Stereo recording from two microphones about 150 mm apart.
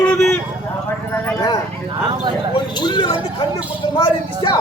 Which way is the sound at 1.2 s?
25° left (ahead or behind).